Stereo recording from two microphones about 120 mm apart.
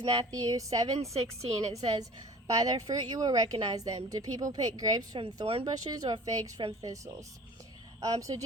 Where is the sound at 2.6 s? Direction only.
30° right (ahead or behind).